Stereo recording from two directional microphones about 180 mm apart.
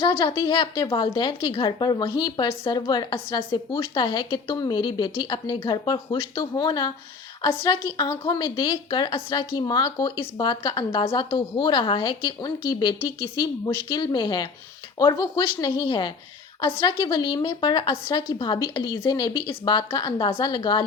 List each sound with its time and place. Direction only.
0.0 s a woman's voice: 25° left (ahead or behind)